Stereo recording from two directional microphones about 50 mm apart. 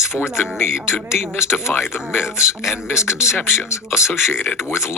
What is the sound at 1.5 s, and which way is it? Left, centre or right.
Speech, left.